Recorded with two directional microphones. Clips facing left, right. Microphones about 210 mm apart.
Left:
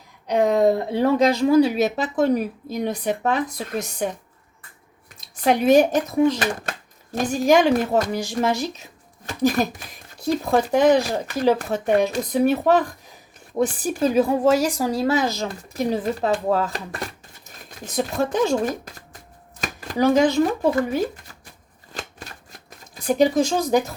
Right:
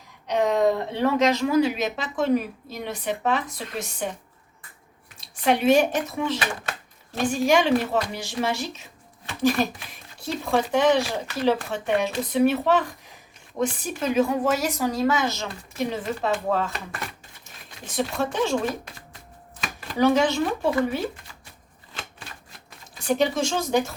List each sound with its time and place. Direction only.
0.4 s a woman's voice: 35° left (ahead or behind)
5.4 s a woman's voice: 40° left (ahead or behind)
21.9 s shuffling cards: 40° left (ahead or behind)
23.0 s a woman's voice: 35° left (ahead or behind)